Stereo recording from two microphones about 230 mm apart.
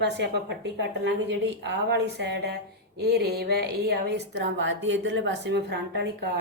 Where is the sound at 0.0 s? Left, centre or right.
Right.